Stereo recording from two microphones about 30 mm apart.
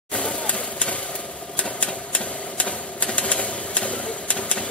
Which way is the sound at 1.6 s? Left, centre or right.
Left.